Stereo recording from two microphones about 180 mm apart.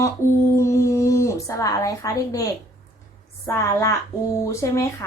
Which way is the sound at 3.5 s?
15° left (ahead or behind).